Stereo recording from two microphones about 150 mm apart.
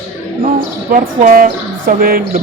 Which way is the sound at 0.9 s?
65° right (ahead or behind).